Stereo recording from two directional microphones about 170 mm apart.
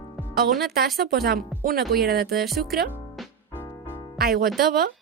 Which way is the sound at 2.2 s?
Centre (ahead or behind).